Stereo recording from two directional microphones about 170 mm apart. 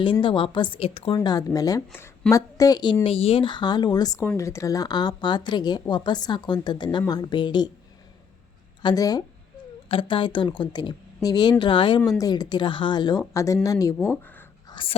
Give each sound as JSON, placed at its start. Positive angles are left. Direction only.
{"t": 0.0, "sound": "a woman's voice", "side_deg": 30}
{"t": 8.8, "sound": "a woman's voice", "side_deg": 25}
{"t": 14.7, "sound": "whispering", "side_deg": 30}